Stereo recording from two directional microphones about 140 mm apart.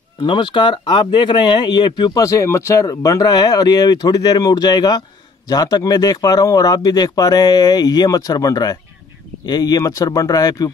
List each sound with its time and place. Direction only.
0.2 s speech: 35° left (ahead or behind)